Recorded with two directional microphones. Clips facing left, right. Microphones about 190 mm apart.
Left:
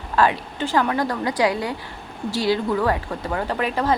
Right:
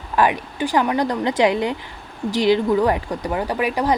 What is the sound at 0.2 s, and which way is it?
Speech, 15° right (ahead or behind).